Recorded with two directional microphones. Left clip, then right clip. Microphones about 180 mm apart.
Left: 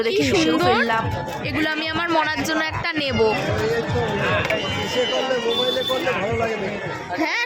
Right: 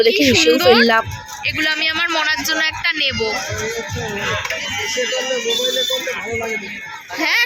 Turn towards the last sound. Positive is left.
turn(degrees=15)  # may be behind; listen again after turning